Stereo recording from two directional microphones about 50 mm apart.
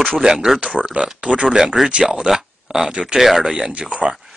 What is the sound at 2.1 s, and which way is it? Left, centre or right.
Speech, centre.